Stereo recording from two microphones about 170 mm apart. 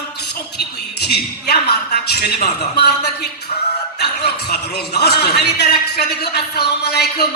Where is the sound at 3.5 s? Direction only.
45° left (ahead or behind).